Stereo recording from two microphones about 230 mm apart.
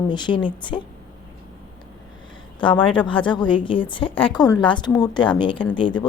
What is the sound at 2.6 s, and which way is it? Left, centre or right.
A woman's voice, left.